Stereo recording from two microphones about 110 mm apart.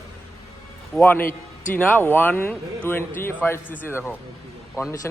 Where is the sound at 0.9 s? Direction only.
15° left (ahead or behind).